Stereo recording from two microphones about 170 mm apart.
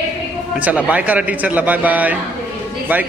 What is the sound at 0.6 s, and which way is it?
Speech, 10° right (ahead or behind).